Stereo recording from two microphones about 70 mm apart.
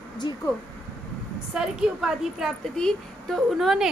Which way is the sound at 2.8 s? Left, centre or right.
Centre.